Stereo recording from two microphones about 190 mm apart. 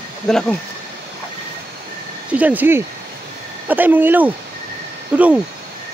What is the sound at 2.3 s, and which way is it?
Speech, 10° right (ahead or behind).